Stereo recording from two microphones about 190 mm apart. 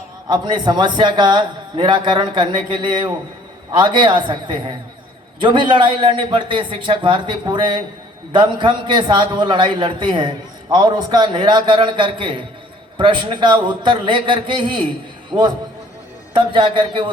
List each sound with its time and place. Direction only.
0.3 s a man's voice: 25° right (ahead or behind)